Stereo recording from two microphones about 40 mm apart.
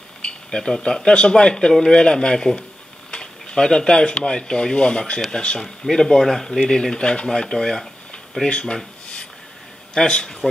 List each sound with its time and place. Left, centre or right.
0.2 s a sound: left
0.8 s speech: centre
5.6 s speech: centre
6.7 s speech: centre
8.5 s speech: left
9.9 s speech: left